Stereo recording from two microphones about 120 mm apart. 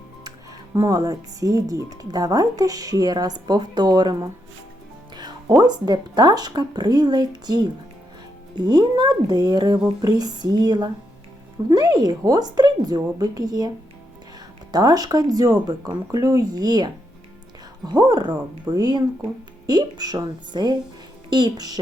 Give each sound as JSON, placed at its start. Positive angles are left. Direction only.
{"t": 0.3, "sound": "speech", "side_deg": -30}
{"t": 14.7, "sound": "speech", "side_deg": -30}